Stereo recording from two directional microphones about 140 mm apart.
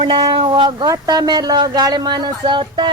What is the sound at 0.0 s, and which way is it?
Speech, 35° right (ahead or behind).